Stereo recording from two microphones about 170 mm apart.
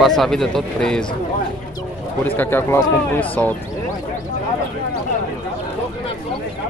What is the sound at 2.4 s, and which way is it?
Speech, 10° left (ahead or behind).